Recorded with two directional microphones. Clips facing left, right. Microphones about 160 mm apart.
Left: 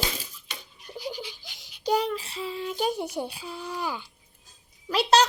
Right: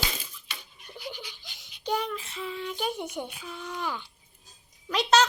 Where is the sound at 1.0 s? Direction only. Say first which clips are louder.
Left 5 dB; 35° left (ahead or behind).